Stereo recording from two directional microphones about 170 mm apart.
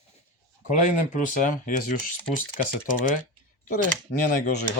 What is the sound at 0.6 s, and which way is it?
Speech, 50° left (ahead or behind).